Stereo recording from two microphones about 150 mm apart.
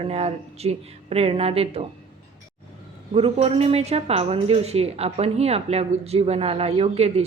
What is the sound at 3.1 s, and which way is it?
A woman's voice, 40° right (ahead or behind).